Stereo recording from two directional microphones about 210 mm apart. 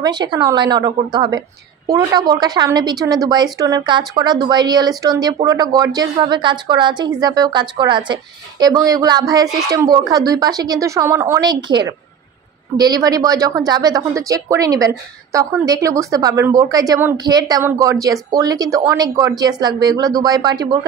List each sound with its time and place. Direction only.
0.0 s a woman's voice: 20° right (ahead or behind)